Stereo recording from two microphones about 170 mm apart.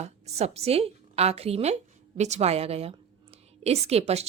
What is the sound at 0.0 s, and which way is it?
A woman's voice, 40° right (ahead or behind).